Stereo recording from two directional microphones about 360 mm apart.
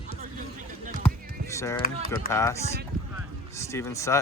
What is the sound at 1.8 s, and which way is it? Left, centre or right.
Speech, left.